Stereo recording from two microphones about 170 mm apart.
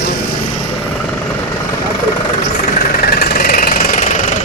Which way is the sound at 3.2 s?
55° left (ahead or behind).